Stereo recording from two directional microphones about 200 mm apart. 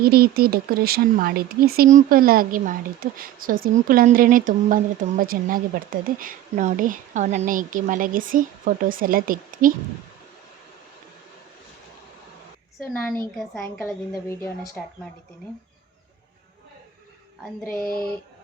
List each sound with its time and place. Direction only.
0.0 s speech: 50° right (ahead or behind)
13.8 s a woman's voice: 15° left (ahead or behind)
17.7 s a sound: 45° left (ahead or behind)